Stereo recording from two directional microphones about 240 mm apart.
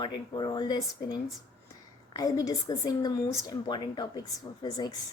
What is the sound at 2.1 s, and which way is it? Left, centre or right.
Speech, centre.